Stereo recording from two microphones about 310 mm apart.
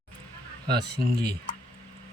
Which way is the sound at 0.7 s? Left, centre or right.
Right.